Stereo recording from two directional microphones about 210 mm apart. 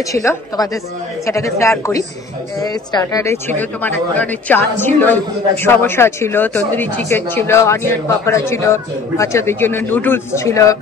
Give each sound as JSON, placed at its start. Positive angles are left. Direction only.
{"t": 0.1, "sound": "a woman's voice", "side_deg": 15}